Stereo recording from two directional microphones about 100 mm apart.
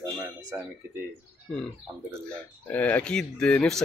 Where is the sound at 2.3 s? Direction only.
15° left (ahead or behind).